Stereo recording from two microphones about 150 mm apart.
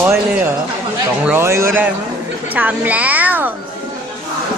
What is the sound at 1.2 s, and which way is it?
A woman's voice, 15° right (ahead or behind).